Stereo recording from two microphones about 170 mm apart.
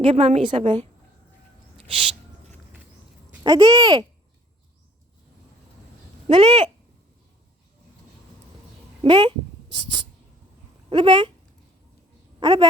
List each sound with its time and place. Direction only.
0.0 s a woman's voice: 35° right (ahead or behind)
1.7 s a sound: 30° right (ahead or behind)
3.4 s speech: 20° right (ahead or behind)
6.2 s speech: 30° right (ahead or behind)
9.0 s speech: 30° right (ahead or behind)
10.8 s speech: 25° right (ahead or behind)
12.4 s a woman's voice: 25° right (ahead or behind)